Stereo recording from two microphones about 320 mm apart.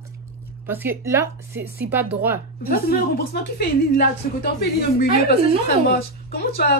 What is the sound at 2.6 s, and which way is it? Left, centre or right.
A woman's voice, left.